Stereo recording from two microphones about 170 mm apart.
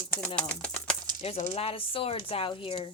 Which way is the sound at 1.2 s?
40° left (ahead or behind).